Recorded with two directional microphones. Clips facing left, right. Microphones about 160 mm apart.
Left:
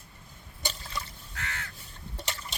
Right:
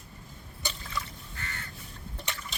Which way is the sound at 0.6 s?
35° left (ahead or behind).